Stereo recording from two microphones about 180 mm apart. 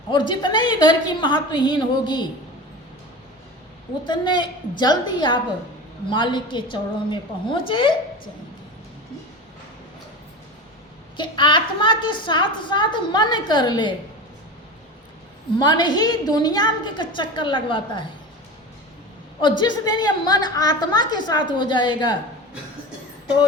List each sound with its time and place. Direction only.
0.1 s a woman's voice: 25° left (ahead or behind)
4.0 s a woman's voice: 25° left (ahead or behind)
11.2 s a woman's voice: 25° left (ahead or behind)
15.5 s a woman's voice: 25° left (ahead or behind)
19.4 s a woman's voice: 25° left (ahead or behind)